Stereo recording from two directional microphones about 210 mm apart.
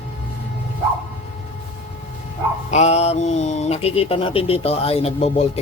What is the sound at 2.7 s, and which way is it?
Speech, 30° left (ahead or behind).